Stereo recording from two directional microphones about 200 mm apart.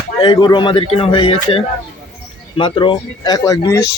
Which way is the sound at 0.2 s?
20° left (ahead or behind).